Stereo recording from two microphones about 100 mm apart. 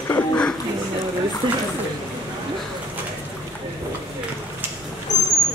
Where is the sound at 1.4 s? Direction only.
50° right (ahead or behind).